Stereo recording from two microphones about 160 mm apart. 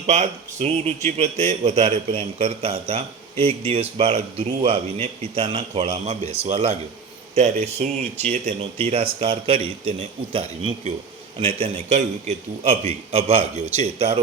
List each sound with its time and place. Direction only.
0.1 s a man's voice: 45° right (ahead or behind)